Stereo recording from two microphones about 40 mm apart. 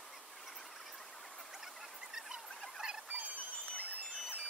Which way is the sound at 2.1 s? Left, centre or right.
Centre.